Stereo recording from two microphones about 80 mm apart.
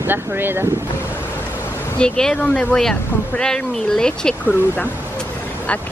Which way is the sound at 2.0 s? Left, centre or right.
Centre.